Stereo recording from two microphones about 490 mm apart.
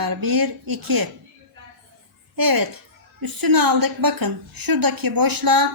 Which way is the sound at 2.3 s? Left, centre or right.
Right.